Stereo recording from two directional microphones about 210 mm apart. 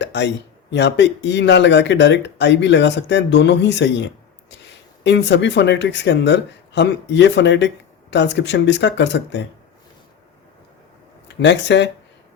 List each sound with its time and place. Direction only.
0.0 s speech: 55° left (ahead or behind)
11.3 s speech: 55° left (ahead or behind)